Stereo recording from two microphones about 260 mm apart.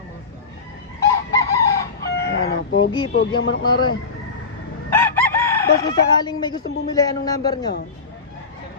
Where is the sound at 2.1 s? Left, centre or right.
Left.